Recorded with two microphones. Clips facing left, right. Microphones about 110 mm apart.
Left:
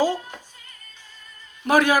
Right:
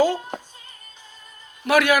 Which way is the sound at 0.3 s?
45° right (ahead or behind).